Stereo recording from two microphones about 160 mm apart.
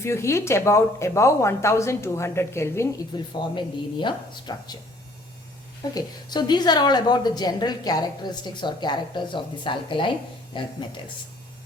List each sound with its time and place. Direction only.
0.0 s speech: 15° left (ahead or behind)
3.2 s a woman's voice: 30° left (ahead or behind)
5.9 s a woman's voice: 25° left (ahead or behind)